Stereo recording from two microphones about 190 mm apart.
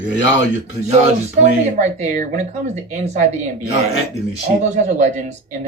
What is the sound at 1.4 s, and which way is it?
Speech, 40° right (ahead or behind).